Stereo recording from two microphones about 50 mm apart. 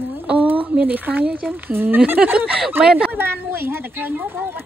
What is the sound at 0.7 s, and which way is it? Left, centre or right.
Speech, right.